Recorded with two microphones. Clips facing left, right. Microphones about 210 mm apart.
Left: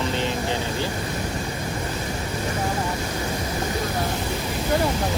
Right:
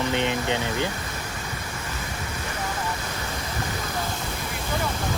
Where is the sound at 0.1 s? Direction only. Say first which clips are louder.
Even; 20° right (ahead or behind).